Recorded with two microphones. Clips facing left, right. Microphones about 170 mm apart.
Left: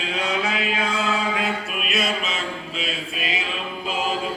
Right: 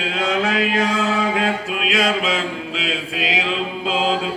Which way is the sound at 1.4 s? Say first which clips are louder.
Right 5 dB; 90° right.